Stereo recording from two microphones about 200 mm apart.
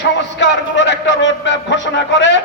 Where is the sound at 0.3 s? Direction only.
65° left (ahead or behind).